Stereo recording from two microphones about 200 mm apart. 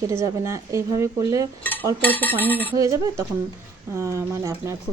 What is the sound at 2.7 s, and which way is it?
Speech, 15° right (ahead or behind).